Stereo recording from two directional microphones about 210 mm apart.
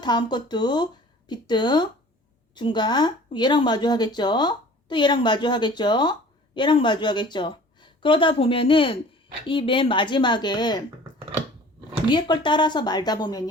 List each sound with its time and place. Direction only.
0.0 s speech: 20° left (ahead or behind)
12.1 s speech: 20° left (ahead or behind)